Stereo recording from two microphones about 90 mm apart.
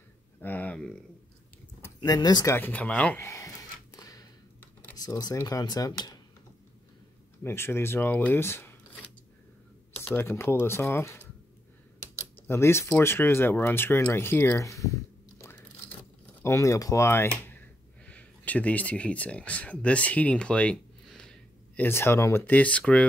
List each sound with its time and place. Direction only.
0.4 s a sound: 20° left (ahead or behind)
2.0 s speech: 50° left (ahead or behind)
2.4 s speech: 25° left (ahead or behind)
3.2 s a sound: 35° left (ahead or behind)
4.9 s speech: 45° left (ahead or behind)
7.4 s speech: 25° left (ahead or behind)
10.0 s speech: 30° left (ahead or behind)
12.4 s speech: 30° left (ahead or behind)
14.6 s a sound: 35° left (ahead or behind)
16.4 s speech: 35° left (ahead or behind)
18.0 s speech: 15° left (ahead or behind)
21.7 s speech: 25° left (ahead or behind)
22.5 s speech: 15° left (ahead or behind)